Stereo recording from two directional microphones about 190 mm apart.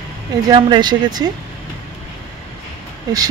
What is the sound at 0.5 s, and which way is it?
Speech, 25° right (ahead or behind).